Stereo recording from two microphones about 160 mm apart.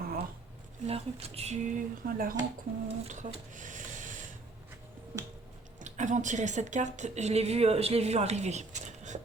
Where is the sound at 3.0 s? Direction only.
50° right (ahead or behind).